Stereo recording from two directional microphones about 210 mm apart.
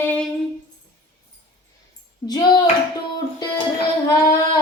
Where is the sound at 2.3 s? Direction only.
20° left (ahead or behind).